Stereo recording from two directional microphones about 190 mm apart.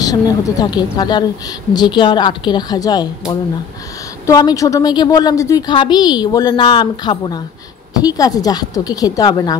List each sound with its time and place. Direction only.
0.0 s a woman's voice: 20° left (ahead or behind)